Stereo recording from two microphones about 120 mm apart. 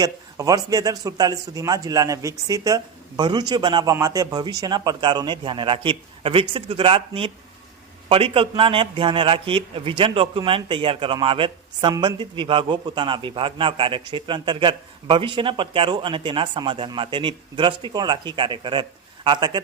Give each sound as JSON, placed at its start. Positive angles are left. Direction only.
{"t": 0.0, "sound": "a man's voice", "side_deg": -30}